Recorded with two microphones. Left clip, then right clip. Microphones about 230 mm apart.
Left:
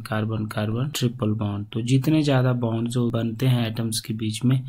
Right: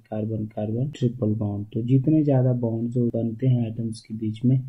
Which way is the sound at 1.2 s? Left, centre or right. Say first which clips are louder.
Even; left.